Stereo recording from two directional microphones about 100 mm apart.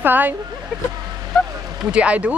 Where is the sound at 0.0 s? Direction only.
15° right (ahead or behind).